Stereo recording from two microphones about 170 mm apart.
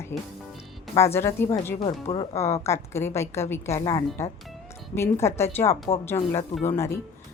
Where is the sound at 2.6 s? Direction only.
15° left (ahead or behind).